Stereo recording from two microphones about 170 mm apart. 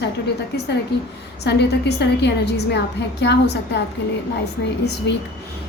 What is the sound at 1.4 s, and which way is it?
A woman's voice, 75° left (ahead or behind).